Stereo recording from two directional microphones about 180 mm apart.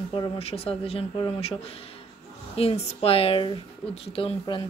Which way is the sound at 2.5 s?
35° left (ahead or behind).